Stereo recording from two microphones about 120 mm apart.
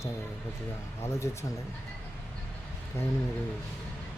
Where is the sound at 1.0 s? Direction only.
25° left (ahead or behind).